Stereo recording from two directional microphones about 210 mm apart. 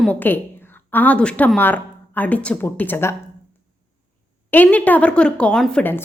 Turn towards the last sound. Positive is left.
turn(degrees=10)  # may be behind; listen again after turning